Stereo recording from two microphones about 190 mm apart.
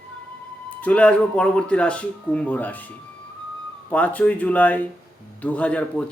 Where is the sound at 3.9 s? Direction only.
5° left (ahead or behind).